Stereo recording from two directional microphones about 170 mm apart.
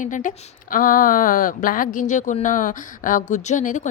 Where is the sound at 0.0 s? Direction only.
50° left (ahead or behind).